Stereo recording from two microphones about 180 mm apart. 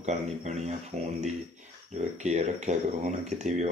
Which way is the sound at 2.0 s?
40° right (ahead or behind).